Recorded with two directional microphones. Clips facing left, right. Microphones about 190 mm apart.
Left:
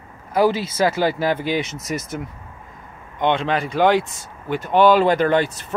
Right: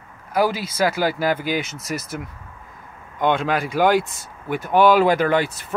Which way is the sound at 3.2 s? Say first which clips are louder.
Even; 5° right (ahead or behind).